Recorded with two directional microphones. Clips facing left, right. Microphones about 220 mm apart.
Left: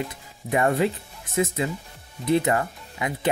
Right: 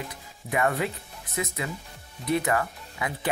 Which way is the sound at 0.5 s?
30° left (ahead or behind).